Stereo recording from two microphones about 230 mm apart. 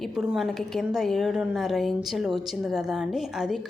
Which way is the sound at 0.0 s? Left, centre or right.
Centre.